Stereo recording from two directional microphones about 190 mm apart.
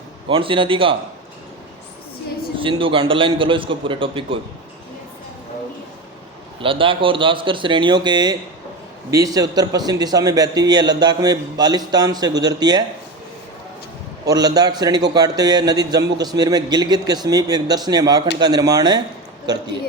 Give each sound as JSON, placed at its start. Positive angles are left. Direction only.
{"t": 0.3, "sound": "a man's voice", "side_deg": -25}
{"t": 2.6, "sound": "a man's voice", "side_deg": -25}
{"t": 6.6, "sound": "a man's voice", "side_deg": -25}
{"t": 14.3, "sound": "a man's voice", "side_deg": -20}